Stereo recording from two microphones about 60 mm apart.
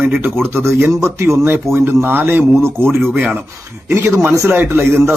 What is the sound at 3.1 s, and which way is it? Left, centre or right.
Mantra, right.